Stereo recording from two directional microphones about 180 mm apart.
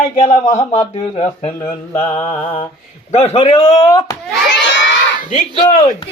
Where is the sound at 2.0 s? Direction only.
15° left (ahead or behind).